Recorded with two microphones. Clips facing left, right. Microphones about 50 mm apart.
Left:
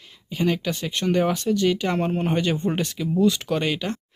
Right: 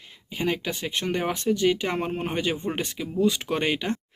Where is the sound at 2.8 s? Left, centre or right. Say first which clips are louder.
Left 2 dB; right.